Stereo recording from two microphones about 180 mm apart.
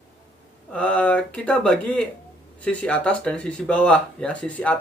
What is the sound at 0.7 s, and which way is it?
Speech, 5° left (ahead or behind).